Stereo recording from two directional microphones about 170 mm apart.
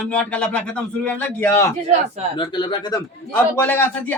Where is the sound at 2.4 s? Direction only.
25° left (ahead or behind).